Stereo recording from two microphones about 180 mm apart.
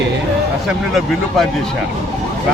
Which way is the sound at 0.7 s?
Centre (ahead or behind).